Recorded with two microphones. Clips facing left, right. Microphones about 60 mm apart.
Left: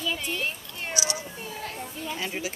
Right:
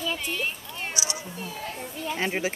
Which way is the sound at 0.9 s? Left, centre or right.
Right.